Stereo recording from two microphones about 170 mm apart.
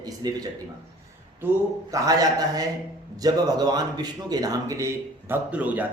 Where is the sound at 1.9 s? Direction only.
20° right (ahead or behind).